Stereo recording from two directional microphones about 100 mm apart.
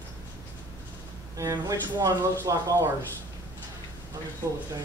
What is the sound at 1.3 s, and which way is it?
Speech, 35° right (ahead or behind).